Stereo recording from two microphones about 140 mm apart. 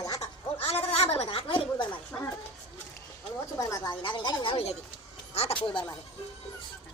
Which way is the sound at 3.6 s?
25° left (ahead or behind).